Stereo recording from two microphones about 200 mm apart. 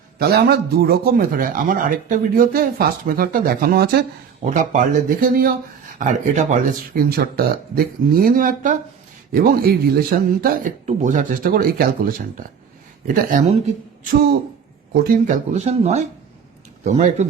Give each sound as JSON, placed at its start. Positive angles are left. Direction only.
{"t": 0.2, "sound": "speech", "side_deg": -50}
{"t": 4.4, "sound": "speech", "side_deg": -40}
{"t": 15.0, "sound": "speech", "side_deg": -40}